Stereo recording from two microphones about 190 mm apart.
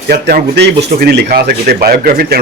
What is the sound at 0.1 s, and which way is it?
A man's voice, 55° right (ahead or behind).